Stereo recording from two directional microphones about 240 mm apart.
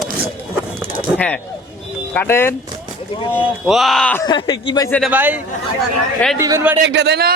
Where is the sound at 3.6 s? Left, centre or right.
Centre.